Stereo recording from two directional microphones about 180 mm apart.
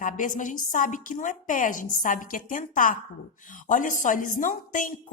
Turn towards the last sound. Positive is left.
turn(degrees=45)  # may be behind; listen again after turning